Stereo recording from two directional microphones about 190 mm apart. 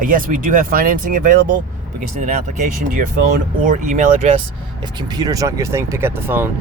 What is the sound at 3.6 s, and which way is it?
Speech, 40° right (ahead or behind).